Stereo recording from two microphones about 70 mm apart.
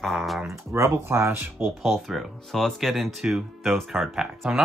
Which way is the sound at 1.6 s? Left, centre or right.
Centre.